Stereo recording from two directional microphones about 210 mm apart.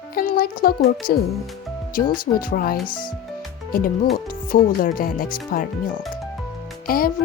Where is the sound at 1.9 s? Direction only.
40° left (ahead or behind).